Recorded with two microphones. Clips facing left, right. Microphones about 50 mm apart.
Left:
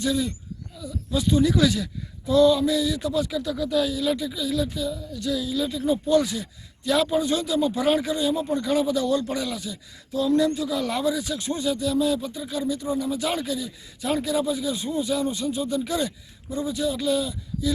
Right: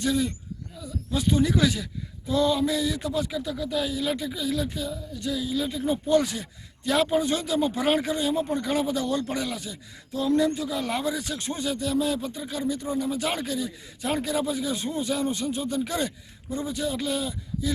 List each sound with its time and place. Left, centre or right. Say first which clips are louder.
0.0 s speech: even; right; by 3.9 s centre
3.9 s speech: left 3 dB; right
5.2 s speech: left 2 dB; right